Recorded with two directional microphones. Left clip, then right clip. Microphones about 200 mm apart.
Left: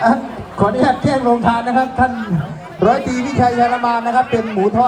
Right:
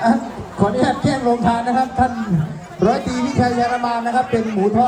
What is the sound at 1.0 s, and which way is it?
Music, 25° left (ahead or behind).